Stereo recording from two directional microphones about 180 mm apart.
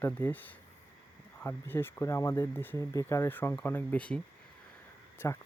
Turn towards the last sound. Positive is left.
turn(degrees=10)  # may be behind; listen again after turning